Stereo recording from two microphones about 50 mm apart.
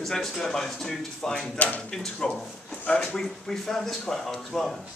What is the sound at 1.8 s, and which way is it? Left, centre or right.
Speech, centre.